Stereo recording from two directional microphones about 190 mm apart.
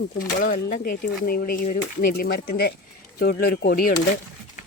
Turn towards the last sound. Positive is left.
turn(degrees=50)  # may be behind; listen again after turning